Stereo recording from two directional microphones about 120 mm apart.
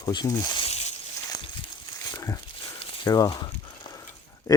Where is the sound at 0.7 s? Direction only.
65° left (ahead or behind).